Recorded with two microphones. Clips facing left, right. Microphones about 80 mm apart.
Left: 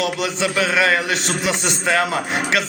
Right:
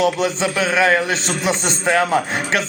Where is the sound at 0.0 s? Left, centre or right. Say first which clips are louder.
Right 3 dB; right.